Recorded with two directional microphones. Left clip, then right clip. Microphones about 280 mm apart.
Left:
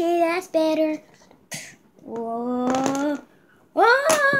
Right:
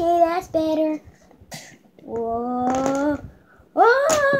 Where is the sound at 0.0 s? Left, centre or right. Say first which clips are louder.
Right 3 dB; centre.